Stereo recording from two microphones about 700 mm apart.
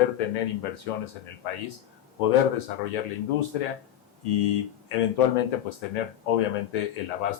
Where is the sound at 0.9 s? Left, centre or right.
Left.